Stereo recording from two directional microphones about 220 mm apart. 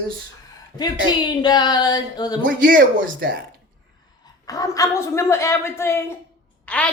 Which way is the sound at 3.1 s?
40° right (ahead or behind).